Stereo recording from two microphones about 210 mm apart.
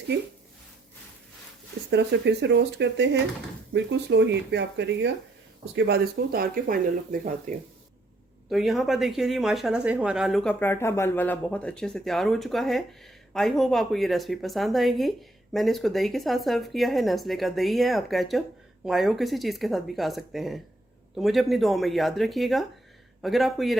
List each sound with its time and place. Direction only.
1.9 s speech: 55° right (ahead or behind)
8.4 s speech: centre (ahead or behind)